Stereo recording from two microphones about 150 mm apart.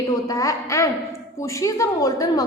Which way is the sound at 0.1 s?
20° left (ahead or behind).